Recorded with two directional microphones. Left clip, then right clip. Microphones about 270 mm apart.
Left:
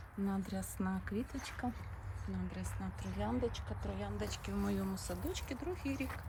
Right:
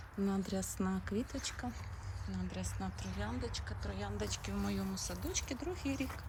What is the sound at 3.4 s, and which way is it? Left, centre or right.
Speech, centre.